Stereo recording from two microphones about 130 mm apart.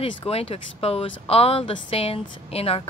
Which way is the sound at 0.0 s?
50° left (ahead or behind).